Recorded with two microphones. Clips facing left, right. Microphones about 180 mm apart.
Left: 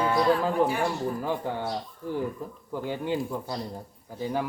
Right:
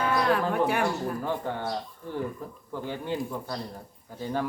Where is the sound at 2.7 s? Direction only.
15° left (ahead or behind).